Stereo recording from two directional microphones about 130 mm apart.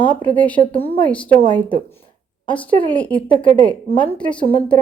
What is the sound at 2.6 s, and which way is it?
Speech, 10° left (ahead or behind).